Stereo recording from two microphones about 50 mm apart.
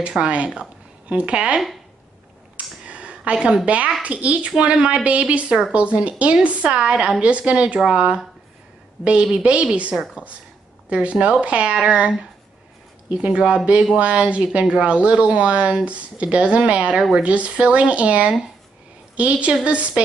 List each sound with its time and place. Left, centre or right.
0.2 s speech: right
2.5 s a sound: right
3.6 s speech: right
9.4 s speech: right